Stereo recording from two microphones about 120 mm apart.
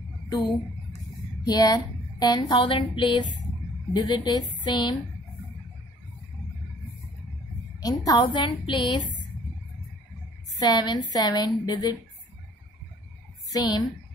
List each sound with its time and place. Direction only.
1.4 s speech: 35° left (ahead or behind)
7.8 s speech: 30° left (ahead or behind)
8.2 s speech: 40° left (ahead or behind)
10.6 s speech: 35° left (ahead or behind)
13.5 s a woman's voice: 35° left (ahead or behind)